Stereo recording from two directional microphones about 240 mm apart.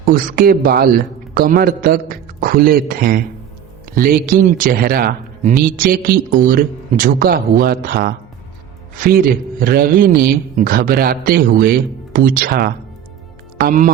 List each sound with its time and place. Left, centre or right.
0.0 s a man's voice: right